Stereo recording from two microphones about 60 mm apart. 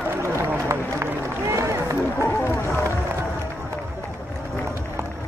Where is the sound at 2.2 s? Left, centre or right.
Left.